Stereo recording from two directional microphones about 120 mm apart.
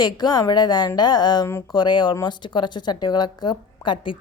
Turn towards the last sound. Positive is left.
turn(degrees=40)  # may be behind; listen again after turning